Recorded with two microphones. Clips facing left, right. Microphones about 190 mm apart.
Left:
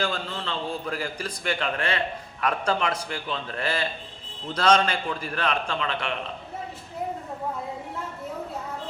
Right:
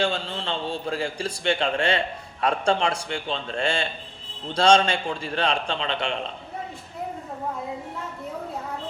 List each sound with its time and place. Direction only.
0.0 s a man's voice: 30° right (ahead or behind)